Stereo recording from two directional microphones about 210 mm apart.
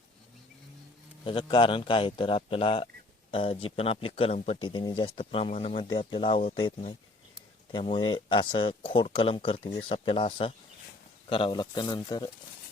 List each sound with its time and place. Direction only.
1.2 s speech: 25° left (ahead or behind)